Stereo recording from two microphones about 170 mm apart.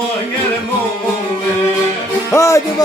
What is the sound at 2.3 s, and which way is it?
Music, 15° left (ahead or behind).